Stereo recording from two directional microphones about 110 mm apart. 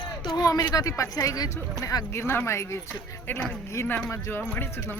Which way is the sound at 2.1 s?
25° left (ahead or behind).